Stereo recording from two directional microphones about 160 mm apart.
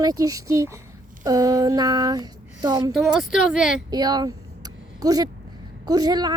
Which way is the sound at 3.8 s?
25° right (ahead or behind).